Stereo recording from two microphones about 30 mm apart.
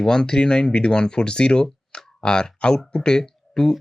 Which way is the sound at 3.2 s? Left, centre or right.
Centre.